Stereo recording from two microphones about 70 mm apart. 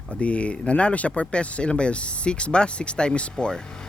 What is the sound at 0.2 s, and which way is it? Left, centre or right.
Speech, centre.